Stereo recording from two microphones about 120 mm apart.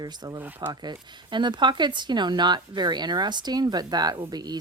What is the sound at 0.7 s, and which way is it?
Speech, 35° right (ahead or behind).